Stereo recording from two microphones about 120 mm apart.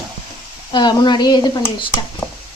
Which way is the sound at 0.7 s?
40° left (ahead or behind).